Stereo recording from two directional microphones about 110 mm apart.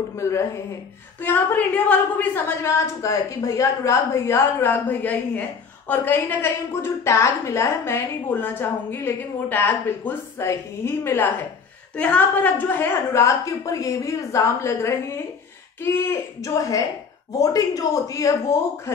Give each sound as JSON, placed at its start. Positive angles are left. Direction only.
{"t": 0.1, "sound": "speech", "side_deg": 25}
{"t": 1.2, "sound": "a woman's voice", "side_deg": 15}